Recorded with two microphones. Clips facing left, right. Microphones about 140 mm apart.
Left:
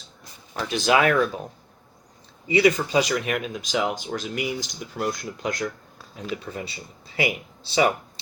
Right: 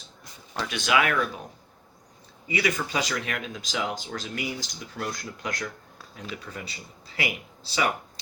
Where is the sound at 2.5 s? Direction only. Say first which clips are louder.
Left 8 dB; 30° left (ahead or behind).